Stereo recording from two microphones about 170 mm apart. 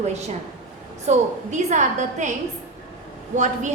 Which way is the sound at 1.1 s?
40° right (ahead or behind).